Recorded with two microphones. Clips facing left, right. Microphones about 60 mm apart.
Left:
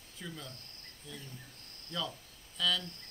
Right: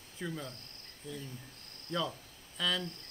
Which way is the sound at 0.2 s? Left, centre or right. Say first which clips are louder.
Right 6 dB; right.